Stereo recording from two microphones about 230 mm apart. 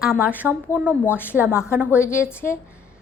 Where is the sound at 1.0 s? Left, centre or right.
Centre.